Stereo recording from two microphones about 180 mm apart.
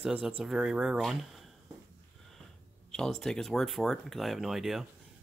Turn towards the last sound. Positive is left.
turn(degrees=0)  # may be behind; listen again after turning